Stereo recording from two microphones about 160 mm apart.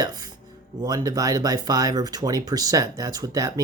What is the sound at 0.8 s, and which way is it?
Speech, 25° right (ahead or behind).